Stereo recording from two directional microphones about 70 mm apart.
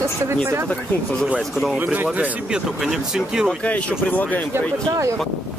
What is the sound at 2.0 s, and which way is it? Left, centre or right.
Speech, right.